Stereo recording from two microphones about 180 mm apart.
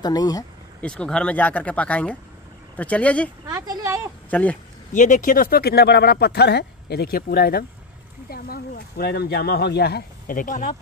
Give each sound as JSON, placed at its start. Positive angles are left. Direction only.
{"t": 0.0, "sound": "speech", "side_deg": 20}
{"t": 0.7, "sound": "speech", "side_deg": 5}
{"t": 3.4, "sound": "speech", "side_deg": -20}
{"t": 4.3, "sound": "speech", "side_deg": 10}
{"t": 4.9, "sound": "speech", "side_deg": 45}